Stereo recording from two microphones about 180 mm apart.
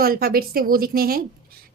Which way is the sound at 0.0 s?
55° right (ahead or behind).